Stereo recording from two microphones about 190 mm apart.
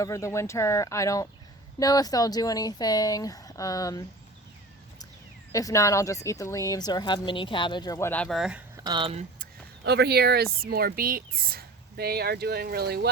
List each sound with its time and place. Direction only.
0.0 s speech: 15° left (ahead or behind)
5.5 s speech: 15° left (ahead or behind); by 8.6 s 5° right (ahead or behind)
8.7 s speech: 20° right (ahead or behind)
9.4 s speech: 60° right (ahead or behind)